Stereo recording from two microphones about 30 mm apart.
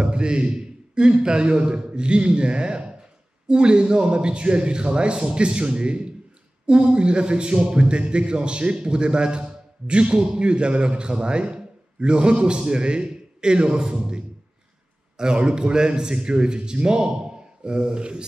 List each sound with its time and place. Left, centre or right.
0.0 s a man's voice: right